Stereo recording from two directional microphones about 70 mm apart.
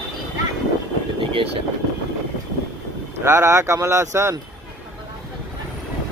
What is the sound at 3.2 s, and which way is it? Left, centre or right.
Speech, right.